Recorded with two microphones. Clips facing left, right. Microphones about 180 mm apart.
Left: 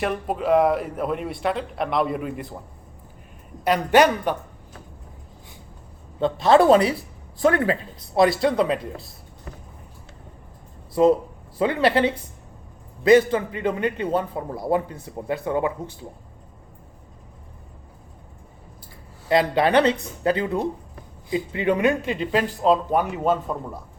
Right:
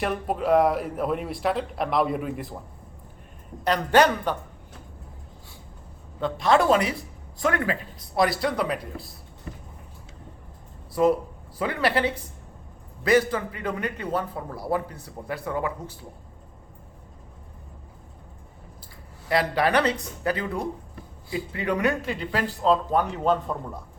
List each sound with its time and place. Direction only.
0.0 s a man's voice: centre (ahead or behind)
3.6 s a woman's voice: 10° left (ahead or behind)
6.1 s speech: 30° left (ahead or behind)
11.0 s speech: 25° left (ahead or behind)
19.3 s speech: 20° left (ahead or behind); by 23.6 s 5° left (ahead or behind)